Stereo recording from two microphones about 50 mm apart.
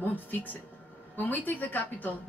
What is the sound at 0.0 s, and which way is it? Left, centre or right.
A woman's voice, left.